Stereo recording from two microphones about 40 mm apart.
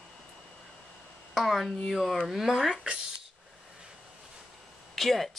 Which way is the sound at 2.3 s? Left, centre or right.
Centre.